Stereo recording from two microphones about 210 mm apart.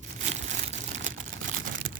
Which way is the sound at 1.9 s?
45° right (ahead or behind).